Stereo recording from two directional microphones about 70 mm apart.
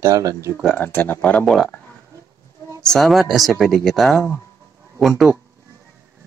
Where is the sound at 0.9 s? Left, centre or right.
Left.